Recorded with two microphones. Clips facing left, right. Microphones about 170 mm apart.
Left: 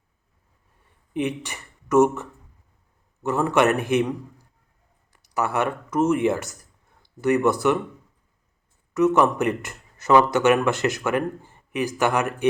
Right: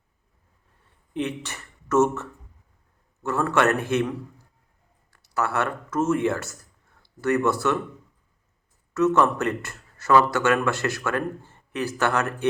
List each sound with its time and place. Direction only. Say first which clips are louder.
1.1 s speech: left 2 dB; 15° left (ahead or behind)
3.2 s a man's voice: left 2 dB; 15° left (ahead or behind)
5.1 s a man's voice: left 1 dB; 15° left (ahead or behind)
8.9 s a man's voice: left 2 dB; 15° left (ahead or behind)